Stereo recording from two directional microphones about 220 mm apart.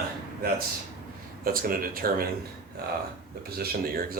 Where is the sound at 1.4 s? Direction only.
40° right (ahead or behind).